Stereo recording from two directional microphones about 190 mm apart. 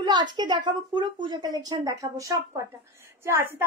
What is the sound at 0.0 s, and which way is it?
A woman's voice, 20° right (ahead or behind).